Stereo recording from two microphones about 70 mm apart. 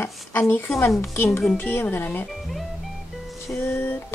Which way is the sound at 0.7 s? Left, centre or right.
Left.